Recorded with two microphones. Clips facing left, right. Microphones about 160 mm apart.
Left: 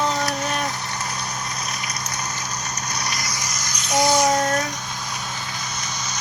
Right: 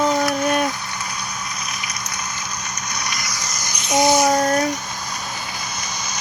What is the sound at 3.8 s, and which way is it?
Child singing, 20° right (ahead or behind).